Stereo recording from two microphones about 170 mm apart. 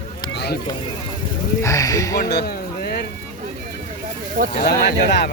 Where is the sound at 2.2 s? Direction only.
70° left (ahead or behind).